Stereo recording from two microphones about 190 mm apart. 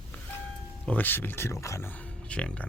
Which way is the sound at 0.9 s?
10° left (ahead or behind).